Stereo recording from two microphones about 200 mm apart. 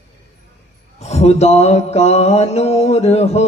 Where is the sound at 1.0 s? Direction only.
35° left (ahead or behind).